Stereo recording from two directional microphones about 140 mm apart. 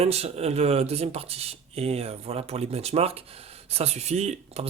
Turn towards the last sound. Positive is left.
turn(degrees=-50)  # may be behind; listen again after turning